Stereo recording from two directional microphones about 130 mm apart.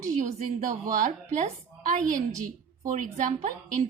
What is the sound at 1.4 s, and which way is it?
Speech, 75° right (ahead or behind).